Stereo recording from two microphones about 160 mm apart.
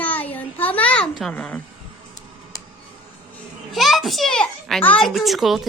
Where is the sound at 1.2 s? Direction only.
5° left (ahead or behind).